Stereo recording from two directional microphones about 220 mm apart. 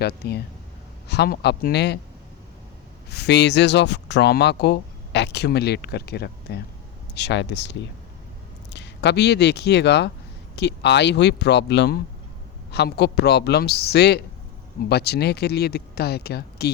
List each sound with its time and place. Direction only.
0.0 s speech: 45° left (ahead or behind)
3.1 s speech: 50° left (ahead or behind)